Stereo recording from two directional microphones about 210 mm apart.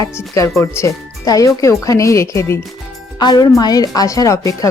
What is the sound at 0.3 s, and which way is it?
Speech, 15° left (ahead or behind).